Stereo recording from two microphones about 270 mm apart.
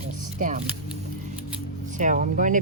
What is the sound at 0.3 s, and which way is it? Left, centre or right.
Speech, right.